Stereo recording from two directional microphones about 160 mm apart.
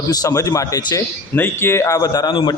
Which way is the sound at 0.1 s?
20° left (ahead or behind).